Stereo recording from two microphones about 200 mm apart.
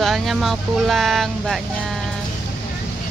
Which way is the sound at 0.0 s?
Centre (ahead or behind).